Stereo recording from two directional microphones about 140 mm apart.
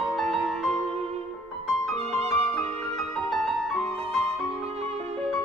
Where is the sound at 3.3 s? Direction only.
Centre (ahead or behind).